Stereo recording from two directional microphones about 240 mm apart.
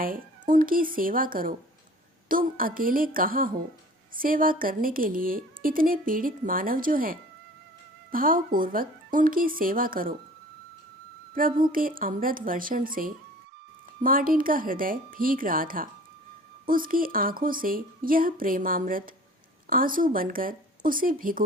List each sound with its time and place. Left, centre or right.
0.0 s speech: right
11.3 s speech: right